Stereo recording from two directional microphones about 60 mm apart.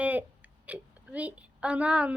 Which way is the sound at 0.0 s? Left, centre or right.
Right.